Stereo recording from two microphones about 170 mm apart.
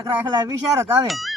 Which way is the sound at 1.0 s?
Centre (ahead or behind).